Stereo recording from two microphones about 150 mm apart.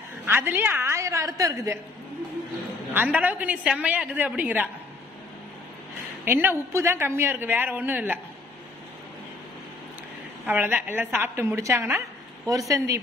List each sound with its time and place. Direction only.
0.2 s a woman's voice: 15° right (ahead or behind)
2.9 s a woman's voice: 10° right (ahead or behind)
6.2 s a woman's voice: 15° right (ahead or behind)
10.4 s a woman's voice: 10° right (ahead or behind)